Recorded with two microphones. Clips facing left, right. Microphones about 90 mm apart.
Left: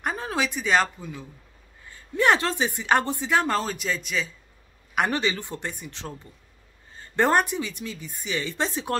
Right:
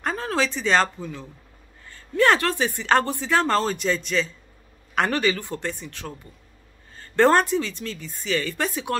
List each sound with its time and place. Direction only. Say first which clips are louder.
0.0 s speech: right 3 dB; 15° left (ahead or behind)